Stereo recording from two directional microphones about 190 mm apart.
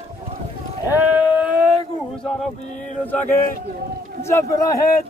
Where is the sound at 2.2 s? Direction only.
Centre (ahead or behind).